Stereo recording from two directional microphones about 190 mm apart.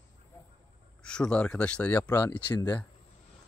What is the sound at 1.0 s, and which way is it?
Speech, 5° left (ahead or behind).